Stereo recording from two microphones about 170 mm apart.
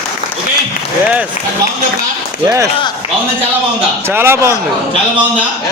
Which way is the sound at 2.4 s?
15° right (ahead or behind).